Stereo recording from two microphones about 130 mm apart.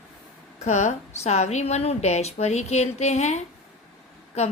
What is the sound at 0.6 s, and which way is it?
A woman's voice, 60° left (ahead or behind).